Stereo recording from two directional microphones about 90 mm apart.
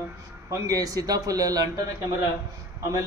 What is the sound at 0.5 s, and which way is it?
A man's voice, 40° right (ahead or behind).